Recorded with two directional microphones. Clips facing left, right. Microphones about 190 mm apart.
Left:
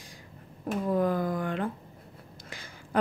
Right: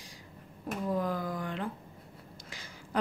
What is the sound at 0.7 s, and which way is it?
Speech, 55° left (ahead or behind).